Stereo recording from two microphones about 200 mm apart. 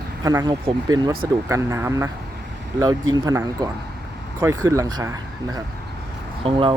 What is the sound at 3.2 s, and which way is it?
Speech, 15° right (ahead or behind).